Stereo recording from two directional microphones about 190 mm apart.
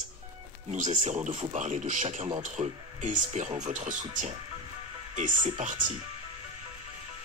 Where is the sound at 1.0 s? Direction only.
35° right (ahead or behind).